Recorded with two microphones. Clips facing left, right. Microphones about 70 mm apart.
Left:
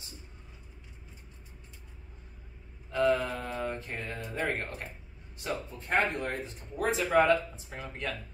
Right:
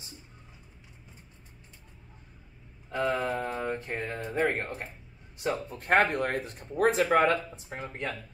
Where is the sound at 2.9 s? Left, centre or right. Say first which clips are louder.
Left 1 dB; right.